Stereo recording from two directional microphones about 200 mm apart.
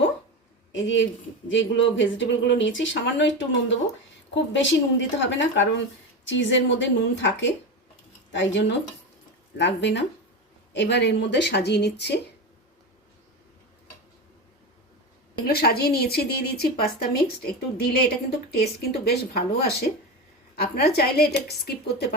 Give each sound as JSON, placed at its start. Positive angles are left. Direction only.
{"t": 0.7, "sound": "a woman's voice", "side_deg": 70}
{"t": 15.4, "sound": "speech", "side_deg": 50}